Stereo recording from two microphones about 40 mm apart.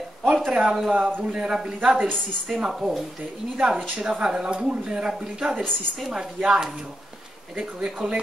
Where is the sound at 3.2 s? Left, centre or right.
Right.